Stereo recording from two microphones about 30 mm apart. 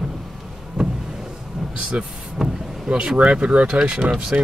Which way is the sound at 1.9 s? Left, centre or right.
Right.